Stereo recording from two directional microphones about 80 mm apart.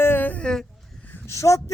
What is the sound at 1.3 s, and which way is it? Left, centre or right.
Speech, left.